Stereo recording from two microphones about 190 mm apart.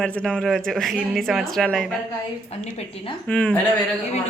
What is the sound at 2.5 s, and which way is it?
Speech, 35° left (ahead or behind).